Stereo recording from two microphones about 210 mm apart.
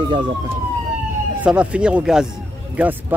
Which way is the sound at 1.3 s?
5° right (ahead or behind).